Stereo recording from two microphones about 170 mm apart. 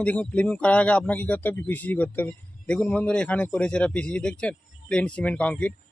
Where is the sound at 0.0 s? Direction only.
5° left (ahead or behind).